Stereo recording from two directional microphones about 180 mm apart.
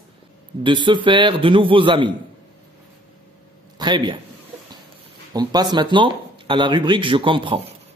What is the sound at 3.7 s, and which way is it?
Speech, 25° right (ahead or behind).